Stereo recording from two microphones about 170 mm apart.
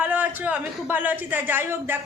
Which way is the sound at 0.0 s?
10° right (ahead or behind).